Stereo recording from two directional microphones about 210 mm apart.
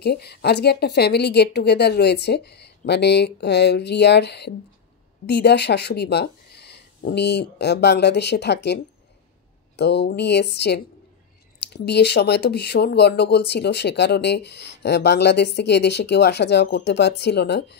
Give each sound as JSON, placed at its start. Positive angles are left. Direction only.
{"t": 0.0, "sound": "speech", "side_deg": 50}
{"t": 9.8, "sound": "speech", "side_deg": 55}